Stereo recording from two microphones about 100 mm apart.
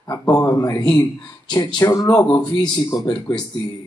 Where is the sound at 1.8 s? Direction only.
35° left (ahead or behind).